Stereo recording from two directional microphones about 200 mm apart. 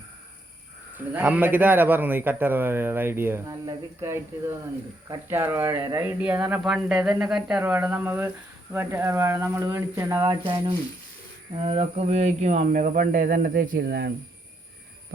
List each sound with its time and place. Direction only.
0.9 s a man's voice: 10° right (ahead or behind); by 14.1 s 55° right (ahead or behind)